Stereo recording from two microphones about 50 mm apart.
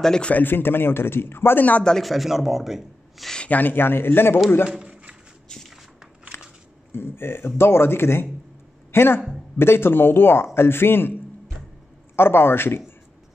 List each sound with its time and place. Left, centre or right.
0.0 s speech: centre
0.3 s speech: left
2.0 s a man's voice: centre
3.4 s speech: left
4.6 s a sound: centre
5.5 s a sound: centre
6.9 s speech: left
12.2 s speech: left